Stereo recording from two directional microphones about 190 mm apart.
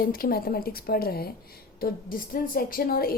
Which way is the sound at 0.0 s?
50° left (ahead or behind).